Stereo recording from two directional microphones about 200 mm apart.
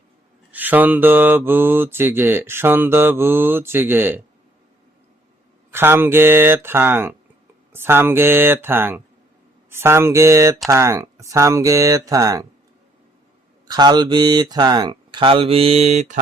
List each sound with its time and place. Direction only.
0.5 s mantra: 10° right (ahead or behind)
5.7 s mantra: 10° right (ahead or behind)
13.7 s speech: 20° right (ahead or behind); by 16.2 s 35° right (ahead or behind)